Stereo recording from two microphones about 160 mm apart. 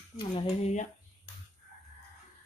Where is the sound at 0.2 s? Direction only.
30° left (ahead or behind).